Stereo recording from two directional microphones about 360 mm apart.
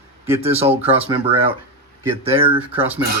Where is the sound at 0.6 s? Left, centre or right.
Centre.